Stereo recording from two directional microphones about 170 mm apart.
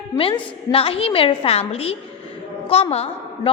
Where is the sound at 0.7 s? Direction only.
35° left (ahead or behind).